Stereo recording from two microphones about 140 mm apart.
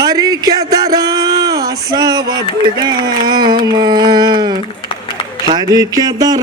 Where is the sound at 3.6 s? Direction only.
30° right (ahead or behind).